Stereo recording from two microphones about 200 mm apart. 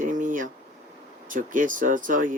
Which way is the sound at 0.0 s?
40° right (ahead or behind).